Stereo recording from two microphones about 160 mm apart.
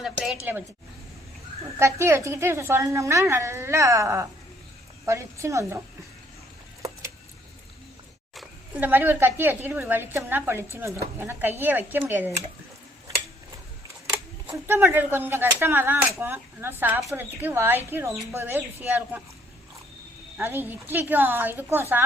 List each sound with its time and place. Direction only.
0.5 s a woman's voice: 10° right (ahead or behind)
1.8 s a woman's voice: 15° right (ahead or behind)
8.8 s a woman's voice: 10° right (ahead or behind)
14.5 s a woman's voice: 15° right (ahead or behind)
20.3 s a woman's voice: 10° right (ahead or behind)